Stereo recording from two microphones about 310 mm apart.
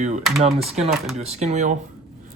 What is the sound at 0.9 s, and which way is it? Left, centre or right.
Speech, centre.